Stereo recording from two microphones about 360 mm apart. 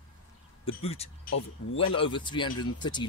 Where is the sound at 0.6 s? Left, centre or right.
Centre.